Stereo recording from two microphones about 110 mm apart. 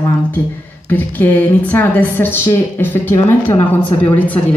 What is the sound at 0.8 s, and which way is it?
A woman's voice, 15° left (ahead or behind).